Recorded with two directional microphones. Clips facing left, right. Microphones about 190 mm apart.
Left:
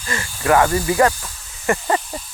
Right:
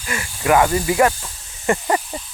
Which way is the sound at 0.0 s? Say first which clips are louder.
Even; 15° right (ahead or behind).